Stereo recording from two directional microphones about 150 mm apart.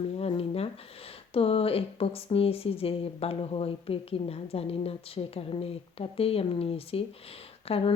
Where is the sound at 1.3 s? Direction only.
40° left (ahead or behind).